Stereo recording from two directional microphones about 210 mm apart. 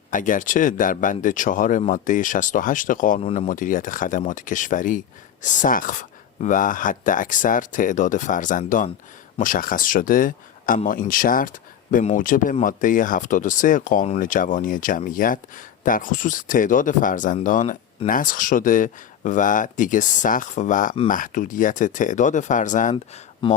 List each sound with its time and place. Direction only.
0.1 s speech: 40° left (ahead or behind)
23.4 s speech: 20° left (ahead or behind)